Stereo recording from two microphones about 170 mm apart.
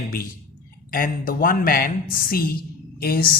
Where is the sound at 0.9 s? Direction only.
55° left (ahead or behind).